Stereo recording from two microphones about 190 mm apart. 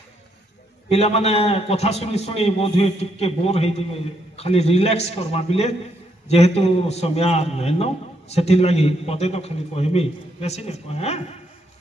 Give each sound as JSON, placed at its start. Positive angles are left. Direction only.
{"t": 0.8, "sound": "a man's voice", "side_deg": 35}